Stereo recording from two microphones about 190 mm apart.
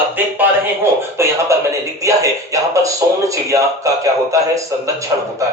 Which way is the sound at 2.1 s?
15° right (ahead or behind).